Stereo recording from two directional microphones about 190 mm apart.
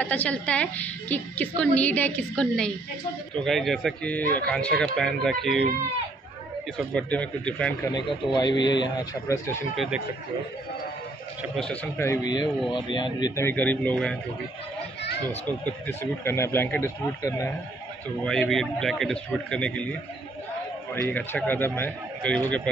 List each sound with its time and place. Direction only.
0.0 s a woman's voice: 5° left (ahead or behind)
6.8 s a woman's voice: 5° left (ahead or behind)
7.9 s a man's voice: 20° left (ahead or behind)
9.8 s speech: 5° right (ahead or behind)
11.5 s a woman's voice: 5° left (ahead or behind)
12.7 s a man's voice: 25° left (ahead or behind)
13.4 s a woman's voice: 10° left (ahead or behind)
15.4 s a woman's voice: 10° left (ahead or behind)
18.2 s a man's voice: 5° left (ahead or behind)